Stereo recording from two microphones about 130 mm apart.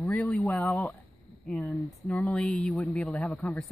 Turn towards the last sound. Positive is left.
turn(degrees=10)  # may be behind; listen again after turning